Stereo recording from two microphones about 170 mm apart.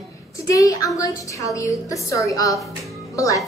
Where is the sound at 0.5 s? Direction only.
20° left (ahead or behind).